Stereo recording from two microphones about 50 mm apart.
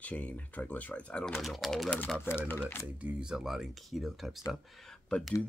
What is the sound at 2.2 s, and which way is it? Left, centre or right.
Speech, left.